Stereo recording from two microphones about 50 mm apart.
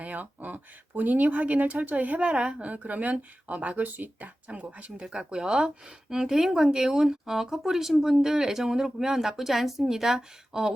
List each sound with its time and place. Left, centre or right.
0.0 s speech: right
5.0 s speech: centre